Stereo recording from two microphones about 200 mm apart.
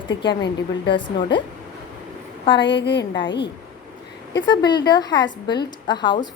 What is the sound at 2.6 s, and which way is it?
Speech, 60° left (ahead or behind).